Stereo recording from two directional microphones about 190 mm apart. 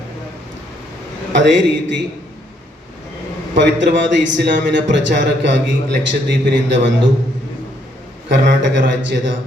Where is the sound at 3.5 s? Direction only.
65° right (ahead or behind).